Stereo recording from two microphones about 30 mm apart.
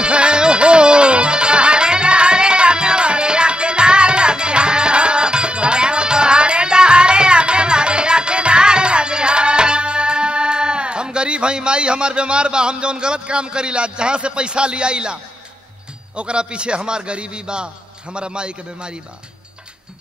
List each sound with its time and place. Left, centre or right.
0.0 s music: right
16.2 s a man's voice: right